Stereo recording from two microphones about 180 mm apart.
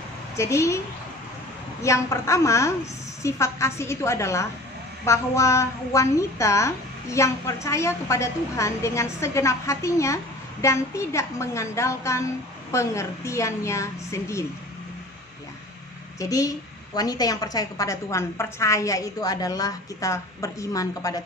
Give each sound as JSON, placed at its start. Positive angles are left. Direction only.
{"t": 0.4, "sound": "a woman's voice", "side_deg": 15}
{"t": 1.8, "sound": "a woman's voice", "side_deg": 15}
{"t": 16.2, "sound": "a woman's voice", "side_deg": 20}